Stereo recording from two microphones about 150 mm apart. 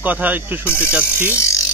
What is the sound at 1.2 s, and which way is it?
Speech, 15° left (ahead or behind).